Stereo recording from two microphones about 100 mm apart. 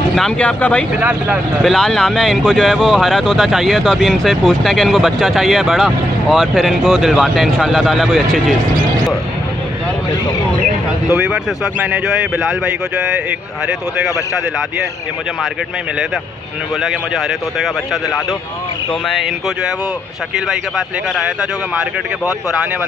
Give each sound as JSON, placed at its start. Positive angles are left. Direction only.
{"t": 0.1, "sound": "speech", "side_deg": 10}
{"t": 0.9, "sound": "speech", "side_deg": -20}
{"t": 1.6, "sound": "speech", "side_deg": 5}
{"t": 11.1, "sound": "speech", "side_deg": -10}
{"t": 19.0, "sound": "speech", "side_deg": 0}